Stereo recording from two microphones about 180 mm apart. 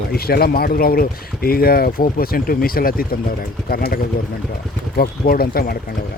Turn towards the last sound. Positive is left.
turn(degrees=55)  # may be behind; listen again after turning